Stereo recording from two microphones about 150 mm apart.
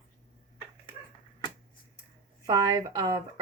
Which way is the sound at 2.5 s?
25° right (ahead or behind).